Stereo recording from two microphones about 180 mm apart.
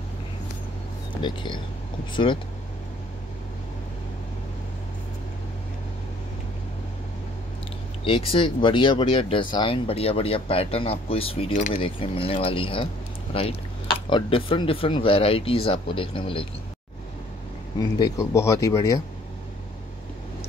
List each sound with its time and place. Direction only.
1.2 s speech: 25° left (ahead or behind)
8.0 s speech: 30° left (ahead or behind)
17.7 s speech: 20° left (ahead or behind)